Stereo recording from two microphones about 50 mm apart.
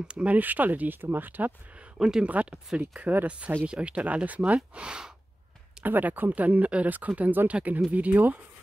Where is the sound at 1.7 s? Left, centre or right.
Right.